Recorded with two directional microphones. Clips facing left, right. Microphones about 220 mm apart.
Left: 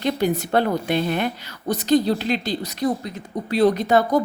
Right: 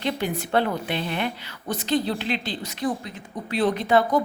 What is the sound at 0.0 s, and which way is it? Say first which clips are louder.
A woman's voice: left 5 dB; 40° left (ahead or behind).